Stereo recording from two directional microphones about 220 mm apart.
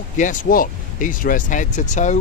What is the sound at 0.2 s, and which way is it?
Speech, 35° left (ahead or behind).